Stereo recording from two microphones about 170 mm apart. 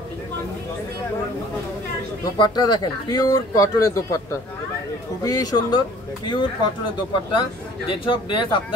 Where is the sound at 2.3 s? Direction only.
25° left (ahead or behind).